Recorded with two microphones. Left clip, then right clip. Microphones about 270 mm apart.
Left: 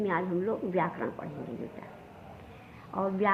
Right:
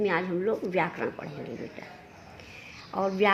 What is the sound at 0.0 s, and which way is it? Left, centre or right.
A woman's voice, right.